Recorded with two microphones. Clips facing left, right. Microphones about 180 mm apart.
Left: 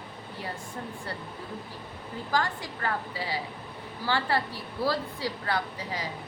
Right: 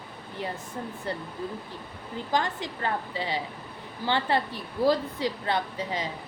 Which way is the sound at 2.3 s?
20° right (ahead or behind).